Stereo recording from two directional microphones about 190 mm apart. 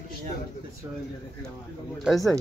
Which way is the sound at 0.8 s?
20° right (ahead or behind).